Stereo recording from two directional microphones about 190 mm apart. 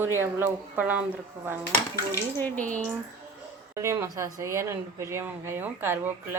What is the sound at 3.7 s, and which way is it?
Speech, 15° right (ahead or behind).